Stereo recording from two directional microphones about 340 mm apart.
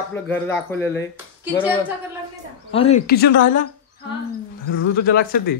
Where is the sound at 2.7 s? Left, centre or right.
Centre.